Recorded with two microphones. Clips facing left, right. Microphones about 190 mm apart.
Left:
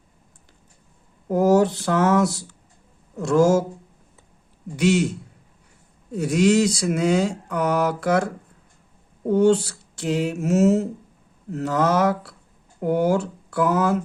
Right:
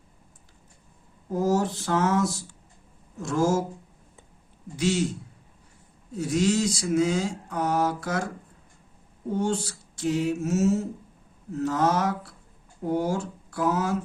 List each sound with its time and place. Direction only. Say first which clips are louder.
1.3 s a sound: left 7 dB; 70° left (ahead or behind)
3.2 s speech: left 7 dB; 75° left (ahead or behind)
4.8 s a man's voice: left 6 dB; 65° left (ahead or behind)
6.1 s speech: left 6 dB; 70° left (ahead or behind)
9.3 s speech: left 10 dB; 70° left (ahead or behind)